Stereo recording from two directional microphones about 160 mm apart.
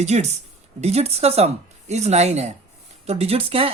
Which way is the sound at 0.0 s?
45° right (ahead or behind).